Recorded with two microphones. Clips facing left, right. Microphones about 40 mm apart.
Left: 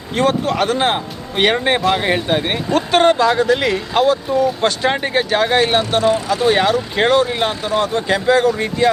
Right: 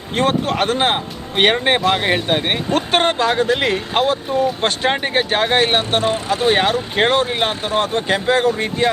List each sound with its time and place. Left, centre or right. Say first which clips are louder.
0.2 s speech: left 1 dB; right
2.0 s speech: even; centre
2.2 s speech: even; right
4.9 s speech: left 1 dB; right
5.1 s speech: left 2 dB; right